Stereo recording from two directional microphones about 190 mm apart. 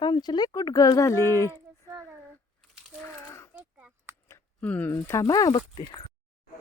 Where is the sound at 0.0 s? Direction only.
20° left (ahead or behind).